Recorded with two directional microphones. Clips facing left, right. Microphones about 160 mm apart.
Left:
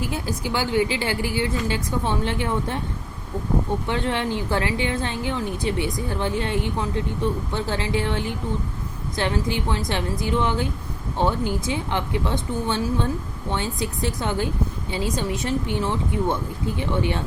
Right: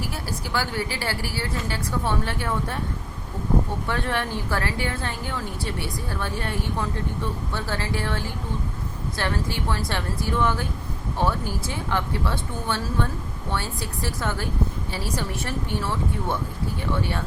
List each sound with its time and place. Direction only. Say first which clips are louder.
0.0 s a woman's voice: left 4 dB; 20° left (ahead or behind)
3.8 s a woman's voice: left 3 dB; 20° left (ahead or behind)